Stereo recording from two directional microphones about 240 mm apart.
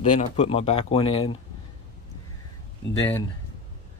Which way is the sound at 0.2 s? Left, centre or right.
Left.